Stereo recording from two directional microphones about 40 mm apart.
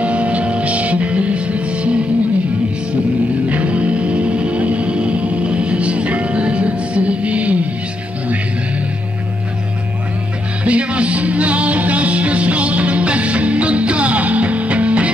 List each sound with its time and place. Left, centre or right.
0.0 s music: right
3.4 s music: right
10.6 s music: right